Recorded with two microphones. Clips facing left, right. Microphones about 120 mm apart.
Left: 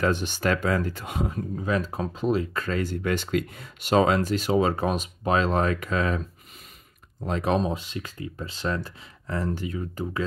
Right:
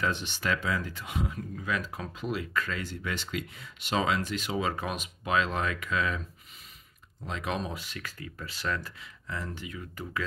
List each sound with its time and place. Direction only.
0.0 s speech: 45° left (ahead or behind)
7.7 s speech: 20° left (ahead or behind)
9.3 s speech: 40° left (ahead or behind)